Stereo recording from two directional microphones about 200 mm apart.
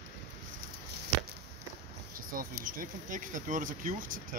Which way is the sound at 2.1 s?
45° right (ahead or behind).